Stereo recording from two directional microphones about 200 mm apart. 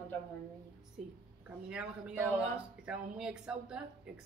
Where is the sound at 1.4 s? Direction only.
5° right (ahead or behind).